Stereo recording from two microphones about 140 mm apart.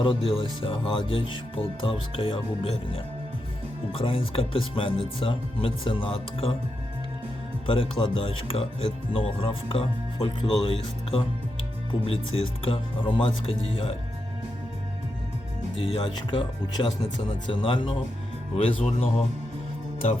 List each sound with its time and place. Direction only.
0.0 s speech: 40° left (ahead or behind)
7.7 s speech: 40° left (ahead or behind)
15.7 s speech: 35° left (ahead or behind)